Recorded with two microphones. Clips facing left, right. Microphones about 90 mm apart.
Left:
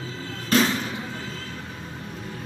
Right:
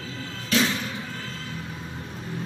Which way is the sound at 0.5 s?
45° left (ahead or behind).